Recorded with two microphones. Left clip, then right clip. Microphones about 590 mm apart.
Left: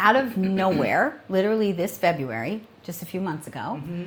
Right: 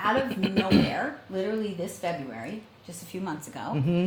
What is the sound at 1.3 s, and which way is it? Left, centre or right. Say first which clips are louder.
A woman's voice: left 8 dB; left.